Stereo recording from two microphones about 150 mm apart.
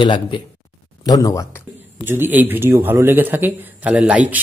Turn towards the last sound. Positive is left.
turn(degrees=-10)  # may be behind; listen again after turning